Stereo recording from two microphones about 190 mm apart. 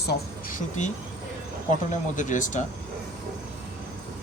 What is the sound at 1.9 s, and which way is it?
Speech, 40° left (ahead or behind).